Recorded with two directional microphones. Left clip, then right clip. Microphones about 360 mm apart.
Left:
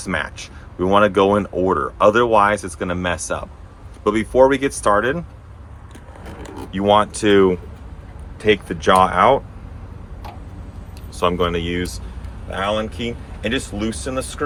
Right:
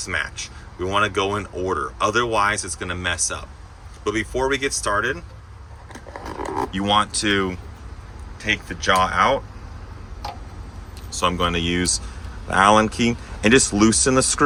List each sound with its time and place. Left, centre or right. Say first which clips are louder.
0.0 s speech: left 1 dB; centre
6.7 s speech: left 6 dB; centre
11.1 s speech: left 2 dB; centre